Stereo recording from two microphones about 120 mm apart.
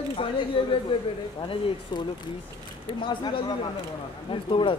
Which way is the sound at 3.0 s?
40° left (ahead or behind).